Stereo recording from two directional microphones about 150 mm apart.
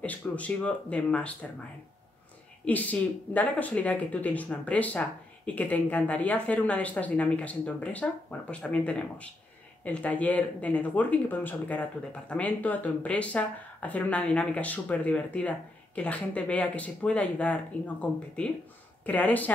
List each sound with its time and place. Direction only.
0.0 s speech: 10° left (ahead or behind)
2.6 s speech: 10° left (ahead or behind)